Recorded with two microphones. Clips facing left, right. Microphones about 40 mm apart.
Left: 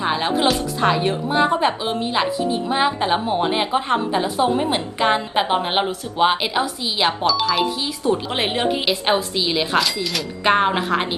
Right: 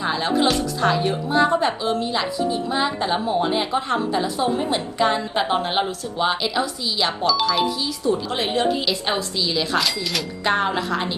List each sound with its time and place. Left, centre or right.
0.0 s a woman's voice: left
7.3 s speech: centre
7.8 s a woman's voice: left
9.7 s speech: centre
10.4 s a woman's voice: left